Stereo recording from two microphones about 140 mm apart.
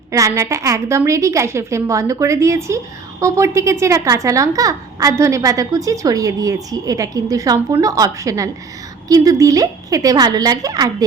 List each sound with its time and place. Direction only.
0.1 s a woman's voice: 25° right (ahead or behind)